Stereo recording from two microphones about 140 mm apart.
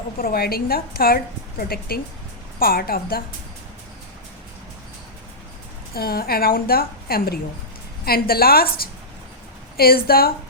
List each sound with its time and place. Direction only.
0.2 s a woman's voice: 90° left
5.9 s a woman's voice: 90° left